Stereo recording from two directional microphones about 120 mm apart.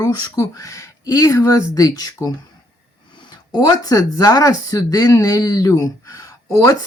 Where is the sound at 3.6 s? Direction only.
30° left (ahead or behind).